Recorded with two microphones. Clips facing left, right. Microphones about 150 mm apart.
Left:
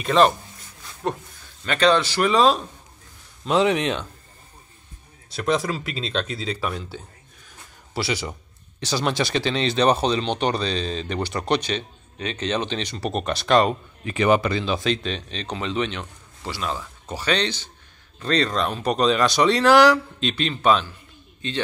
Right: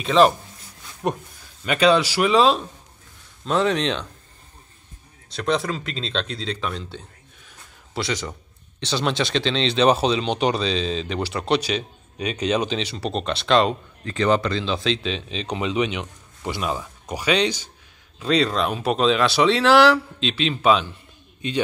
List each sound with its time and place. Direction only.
0.0 s a man's voice: centre (ahead or behind)
1.0 s a man's voice: 15° right (ahead or behind); by 2.6 s centre (ahead or behind)
3.4 s speech: 15° left (ahead or behind)
5.3 s a man's voice: 5° left (ahead or behind)